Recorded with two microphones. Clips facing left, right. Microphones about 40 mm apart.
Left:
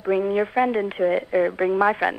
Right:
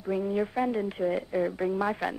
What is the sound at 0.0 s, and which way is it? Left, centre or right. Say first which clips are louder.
Speech: left 7 dB; left.